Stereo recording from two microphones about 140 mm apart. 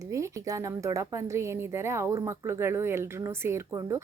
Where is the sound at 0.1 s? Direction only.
20° right (ahead or behind).